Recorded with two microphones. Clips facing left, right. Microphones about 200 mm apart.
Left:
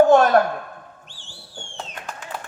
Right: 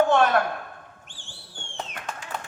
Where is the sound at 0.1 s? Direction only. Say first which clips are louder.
Left 6 dB; 40° left (ahead or behind).